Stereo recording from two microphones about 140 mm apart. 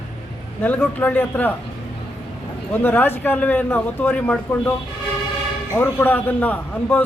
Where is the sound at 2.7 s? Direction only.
15° left (ahead or behind).